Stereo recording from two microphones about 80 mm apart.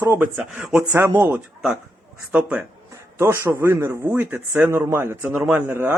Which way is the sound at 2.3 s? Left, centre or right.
Centre.